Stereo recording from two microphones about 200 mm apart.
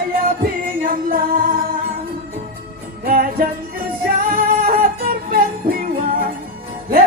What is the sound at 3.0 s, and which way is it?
Music, 45° right (ahead or behind).